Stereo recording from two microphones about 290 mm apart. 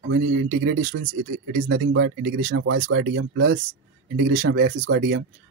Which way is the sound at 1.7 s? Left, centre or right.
Right.